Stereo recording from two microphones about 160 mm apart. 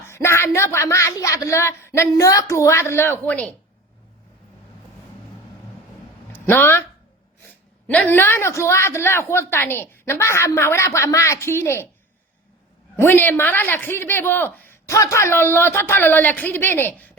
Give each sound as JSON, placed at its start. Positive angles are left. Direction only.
{"t": 0.0, "sound": "speech", "side_deg": 15}
{"t": 6.3, "sound": "speech", "side_deg": 15}
{"t": 7.9, "sound": "speech", "side_deg": 10}
{"t": 13.0, "sound": "speech", "side_deg": 15}